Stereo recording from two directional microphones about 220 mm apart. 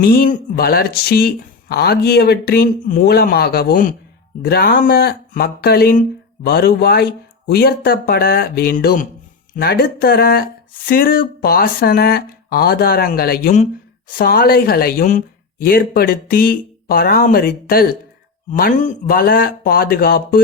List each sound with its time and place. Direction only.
0.0 s speech: 40° left (ahead or behind)